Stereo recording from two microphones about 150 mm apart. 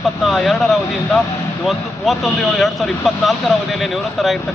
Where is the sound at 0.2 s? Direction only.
Centre (ahead or behind).